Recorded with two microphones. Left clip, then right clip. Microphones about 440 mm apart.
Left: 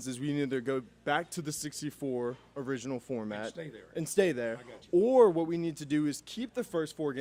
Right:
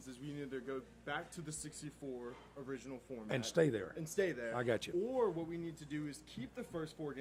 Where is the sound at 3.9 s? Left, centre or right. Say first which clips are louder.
Left 9 dB; left.